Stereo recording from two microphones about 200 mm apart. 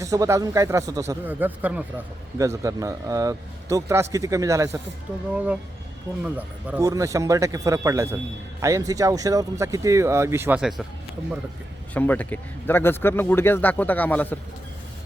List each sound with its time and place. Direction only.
0.0 s speech: 15° right (ahead or behind)
6.2 s speech: 5° right (ahead or behind)
11.9 s speech: 10° left (ahead or behind)